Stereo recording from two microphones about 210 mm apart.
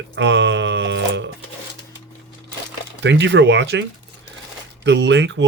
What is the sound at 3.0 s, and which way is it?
Speech, 60° right (ahead or behind).